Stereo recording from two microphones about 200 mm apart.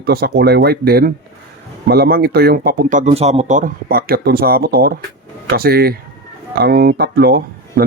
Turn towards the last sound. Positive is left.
turn(degrees=-50)  # may be behind; listen again after turning